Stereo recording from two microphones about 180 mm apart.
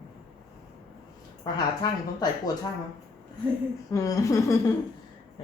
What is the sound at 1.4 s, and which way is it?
Speech, 20° left (ahead or behind).